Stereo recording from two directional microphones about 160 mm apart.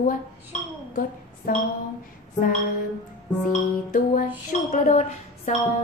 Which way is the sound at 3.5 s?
55° left (ahead or behind).